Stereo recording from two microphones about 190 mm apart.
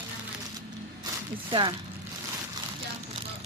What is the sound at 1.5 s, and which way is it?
Speech, 25° right (ahead or behind).